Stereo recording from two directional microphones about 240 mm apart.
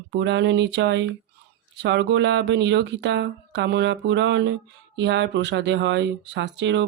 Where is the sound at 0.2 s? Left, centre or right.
Right.